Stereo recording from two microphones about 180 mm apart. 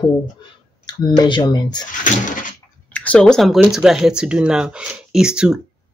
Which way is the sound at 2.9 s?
5° left (ahead or behind).